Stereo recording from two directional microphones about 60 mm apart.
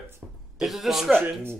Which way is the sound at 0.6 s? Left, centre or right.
Centre.